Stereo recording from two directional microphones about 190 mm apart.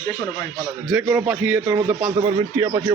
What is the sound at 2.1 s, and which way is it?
Speech, 20° right (ahead or behind).